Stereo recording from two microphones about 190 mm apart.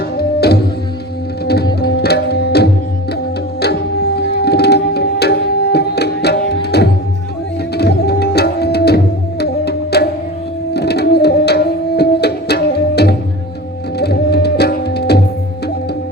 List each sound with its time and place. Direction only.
0.2 s music: 60° left (ahead or behind)
1.8 s tabla: 60° left (ahead or behind)
4.4 s tabla: 60° left (ahead or behind)
7.8 s music: 60° left (ahead or behind)